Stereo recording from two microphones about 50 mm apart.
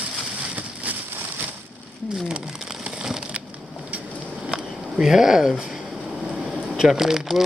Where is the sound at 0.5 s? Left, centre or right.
Right.